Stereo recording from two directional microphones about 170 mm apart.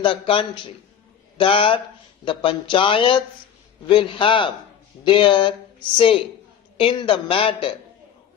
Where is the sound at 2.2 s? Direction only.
30° left (ahead or behind).